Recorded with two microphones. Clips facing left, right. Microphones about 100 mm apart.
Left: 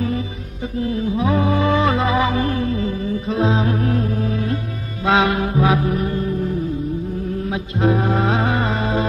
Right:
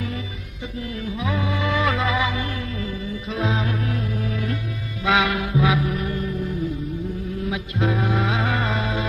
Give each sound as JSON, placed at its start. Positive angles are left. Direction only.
{"t": 0.7, "sound": "music", "side_deg": 30}